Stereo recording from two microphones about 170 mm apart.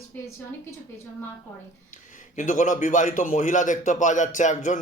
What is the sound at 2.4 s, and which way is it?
A man's voice, 45° left (ahead or behind).